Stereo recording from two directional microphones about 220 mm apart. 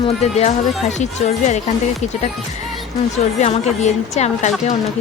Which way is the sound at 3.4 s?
30° left (ahead or behind).